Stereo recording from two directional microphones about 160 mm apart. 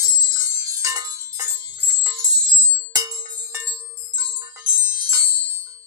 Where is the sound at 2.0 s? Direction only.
25° right (ahead or behind).